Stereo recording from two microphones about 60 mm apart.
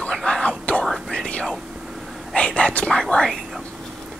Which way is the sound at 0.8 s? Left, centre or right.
Centre.